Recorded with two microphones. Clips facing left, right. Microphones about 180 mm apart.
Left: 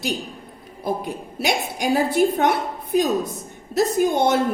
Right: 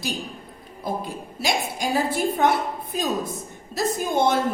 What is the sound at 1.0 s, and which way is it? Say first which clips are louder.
Speech: left 3 dB; 65° left (ahead or behind).